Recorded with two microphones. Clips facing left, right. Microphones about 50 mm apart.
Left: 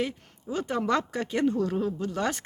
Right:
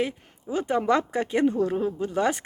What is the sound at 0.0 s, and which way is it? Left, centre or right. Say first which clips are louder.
Speech: right 3 dB; centre.